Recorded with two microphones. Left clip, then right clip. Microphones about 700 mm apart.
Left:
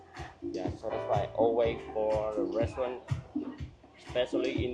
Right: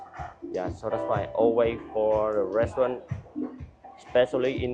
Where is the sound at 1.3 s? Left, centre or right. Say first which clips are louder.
Right 6 dB; right.